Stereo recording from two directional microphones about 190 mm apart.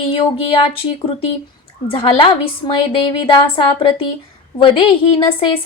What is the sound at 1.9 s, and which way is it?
Speech, 30° left (ahead or behind).